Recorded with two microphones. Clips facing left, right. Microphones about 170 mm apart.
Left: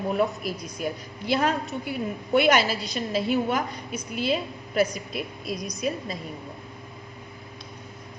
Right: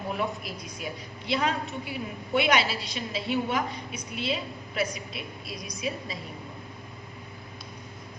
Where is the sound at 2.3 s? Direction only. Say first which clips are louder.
Left 4 dB; 50° left (ahead or behind).